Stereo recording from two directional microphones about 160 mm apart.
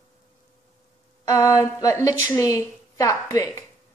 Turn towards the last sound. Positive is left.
turn(degrees=20)  # may be behind; listen again after turning